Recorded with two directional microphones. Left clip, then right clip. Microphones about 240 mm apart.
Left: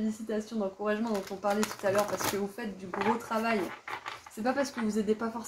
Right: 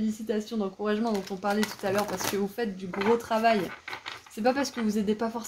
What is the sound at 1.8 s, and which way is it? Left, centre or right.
Speech, right.